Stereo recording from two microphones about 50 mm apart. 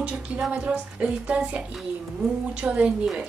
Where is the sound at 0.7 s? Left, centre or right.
Centre.